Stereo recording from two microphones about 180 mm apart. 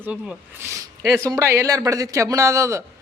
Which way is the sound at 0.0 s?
10° right (ahead or behind).